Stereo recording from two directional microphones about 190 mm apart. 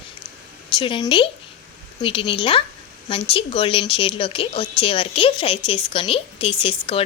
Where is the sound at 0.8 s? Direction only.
25° left (ahead or behind).